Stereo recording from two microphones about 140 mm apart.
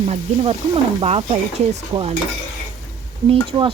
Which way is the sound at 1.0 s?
50° right (ahead or behind).